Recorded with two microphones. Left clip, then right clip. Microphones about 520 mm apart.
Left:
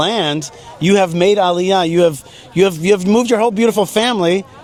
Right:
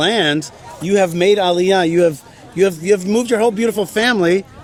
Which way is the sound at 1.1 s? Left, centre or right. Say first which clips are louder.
Left 1 dB; left.